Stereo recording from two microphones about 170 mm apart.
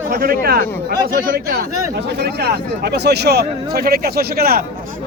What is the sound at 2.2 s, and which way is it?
A man's voice, 75° right (ahead or behind).